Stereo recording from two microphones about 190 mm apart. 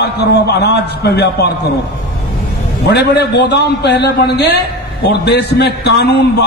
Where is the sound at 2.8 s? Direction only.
60° left (ahead or behind).